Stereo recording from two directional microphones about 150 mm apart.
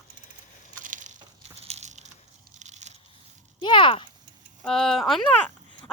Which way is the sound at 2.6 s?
50° right (ahead or behind).